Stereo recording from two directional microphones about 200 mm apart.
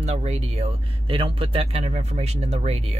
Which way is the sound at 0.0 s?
35° right (ahead or behind).